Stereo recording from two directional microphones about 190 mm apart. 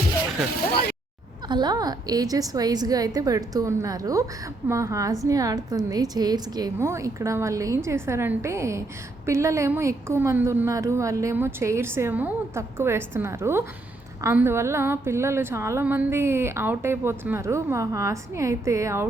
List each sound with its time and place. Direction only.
1.5 s a woman's voice: 20° right (ahead or behind)